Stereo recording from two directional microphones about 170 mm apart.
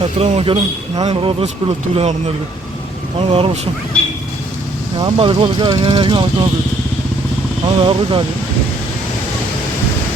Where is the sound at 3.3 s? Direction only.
35° right (ahead or behind).